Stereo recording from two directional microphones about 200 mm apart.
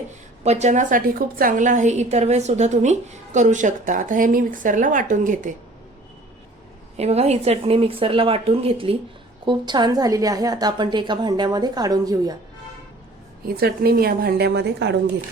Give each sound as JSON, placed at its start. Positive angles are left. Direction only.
{"t": 0.4, "sound": "a woman's voice", "side_deg": -35}
{"t": 6.9, "sound": "a woman's voice", "side_deg": -30}
{"t": 13.6, "sound": "a woman's voice", "side_deg": -50}